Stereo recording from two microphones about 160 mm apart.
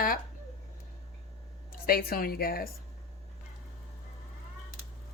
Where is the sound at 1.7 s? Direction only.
70° left (ahead or behind).